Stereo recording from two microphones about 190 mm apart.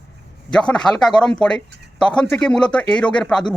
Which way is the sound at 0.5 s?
5° left (ahead or behind).